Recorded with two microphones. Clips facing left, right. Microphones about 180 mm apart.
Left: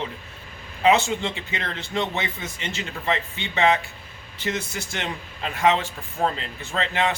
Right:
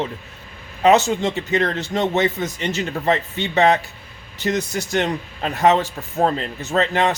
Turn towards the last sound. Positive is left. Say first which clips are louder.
# right 6 dB
turn(degrees=-40)  # may be behind; listen again after turning